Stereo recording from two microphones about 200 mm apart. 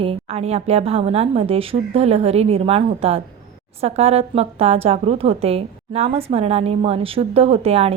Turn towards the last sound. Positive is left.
turn(degrees=-30)  # may be behind; listen again after turning